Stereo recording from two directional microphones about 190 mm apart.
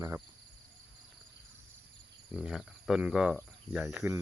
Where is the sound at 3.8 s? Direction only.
10° right (ahead or behind).